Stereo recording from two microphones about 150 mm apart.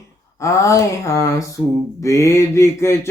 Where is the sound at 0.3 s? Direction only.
20° left (ahead or behind).